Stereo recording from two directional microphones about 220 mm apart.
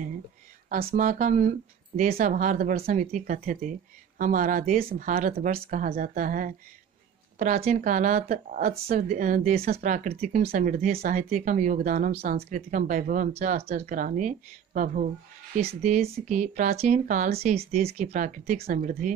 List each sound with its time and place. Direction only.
0.8 s speech: 35° right (ahead or behind)